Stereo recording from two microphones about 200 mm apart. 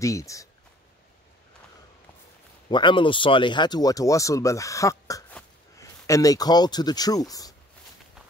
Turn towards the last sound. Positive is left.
turn(degrees=20)  # may be behind; listen again after turning